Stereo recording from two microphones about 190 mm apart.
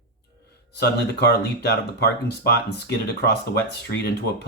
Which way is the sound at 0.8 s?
60° left (ahead or behind).